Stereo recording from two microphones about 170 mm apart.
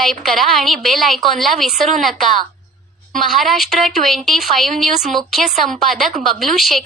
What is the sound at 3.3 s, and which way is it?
A woman's voice, centre (ahead or behind).